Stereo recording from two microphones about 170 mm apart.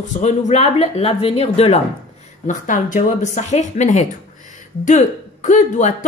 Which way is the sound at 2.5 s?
50° left (ahead or behind).